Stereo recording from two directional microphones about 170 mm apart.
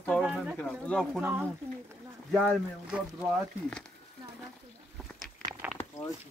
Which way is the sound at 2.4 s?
5° right (ahead or behind).